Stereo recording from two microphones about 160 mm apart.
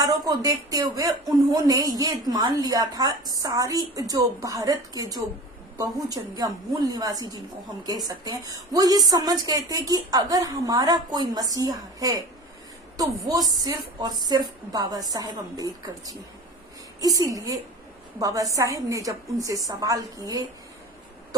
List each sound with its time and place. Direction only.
0.0 s a woman's voice: 20° right (ahead or behind)